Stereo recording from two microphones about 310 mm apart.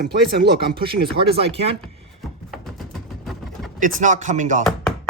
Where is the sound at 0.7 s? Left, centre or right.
Centre.